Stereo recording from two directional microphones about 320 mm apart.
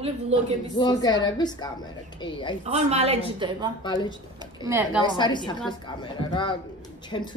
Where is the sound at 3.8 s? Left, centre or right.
Centre.